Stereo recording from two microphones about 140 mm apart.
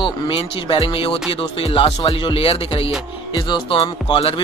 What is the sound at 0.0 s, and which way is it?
Music, 40° left (ahead or behind).